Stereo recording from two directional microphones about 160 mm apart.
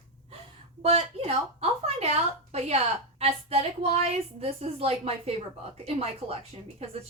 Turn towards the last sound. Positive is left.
turn(degrees=-40)  # may be behind; listen again after turning